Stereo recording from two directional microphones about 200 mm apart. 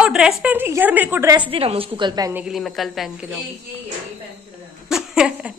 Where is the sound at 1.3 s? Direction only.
25° right (ahead or behind).